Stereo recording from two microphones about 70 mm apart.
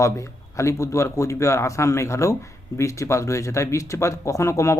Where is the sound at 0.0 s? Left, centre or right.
Left.